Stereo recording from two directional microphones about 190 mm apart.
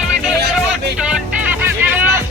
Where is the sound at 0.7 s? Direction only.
5° right (ahead or behind).